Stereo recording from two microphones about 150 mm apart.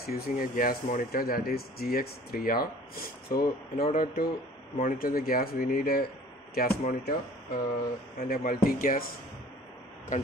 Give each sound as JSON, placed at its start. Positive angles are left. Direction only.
{"t": 0.0, "sound": "speech", "side_deg": 90}
{"t": 3.9, "sound": "speech", "side_deg": 70}